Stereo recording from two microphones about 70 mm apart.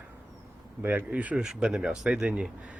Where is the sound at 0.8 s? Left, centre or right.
Right.